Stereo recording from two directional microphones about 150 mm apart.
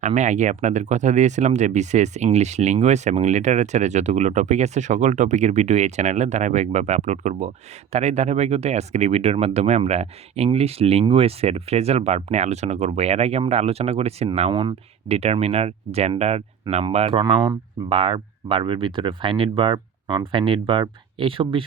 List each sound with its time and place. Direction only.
0.0 s speech: 50° right (ahead or behind); by 21.6 s 35° right (ahead or behind)